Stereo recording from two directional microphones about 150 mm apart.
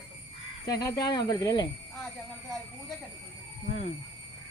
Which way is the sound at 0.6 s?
25° left (ahead or behind).